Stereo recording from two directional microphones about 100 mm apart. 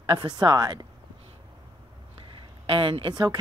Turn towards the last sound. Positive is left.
turn(degrees=-55)  # may be behind; listen again after turning